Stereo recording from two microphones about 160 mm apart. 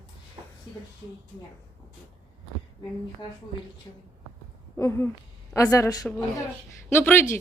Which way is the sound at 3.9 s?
30° left (ahead or behind).